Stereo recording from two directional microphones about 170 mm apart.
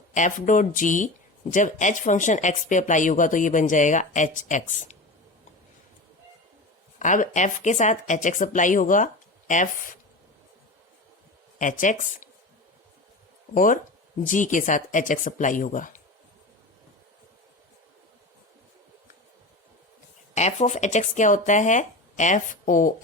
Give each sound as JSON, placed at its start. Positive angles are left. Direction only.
{"t": 0.1, "sound": "speech", "side_deg": 50}
{"t": 7.0, "sound": "speech", "side_deg": 45}
{"t": 11.6, "sound": "speech", "side_deg": 50}
{"t": 13.5, "sound": "speech", "side_deg": 50}
{"t": 20.3, "sound": "speech", "side_deg": 40}